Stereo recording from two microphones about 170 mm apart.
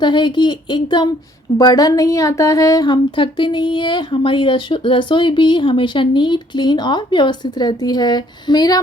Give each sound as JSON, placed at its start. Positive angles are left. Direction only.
{"t": 0.0, "sound": "speech", "side_deg": 25}